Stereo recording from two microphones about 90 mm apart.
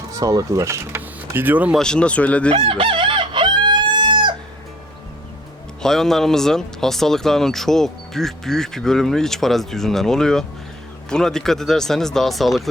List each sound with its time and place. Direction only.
0.1 s speech: 40° right (ahead or behind); by 1.7 s 20° right (ahead or behind)
1.8 s speech: 10° left (ahead or behind)
2.5 s chicken: 90° right; by 4.4 s 60° right (ahead or behind)
5.8 s speech: 5° left (ahead or behind)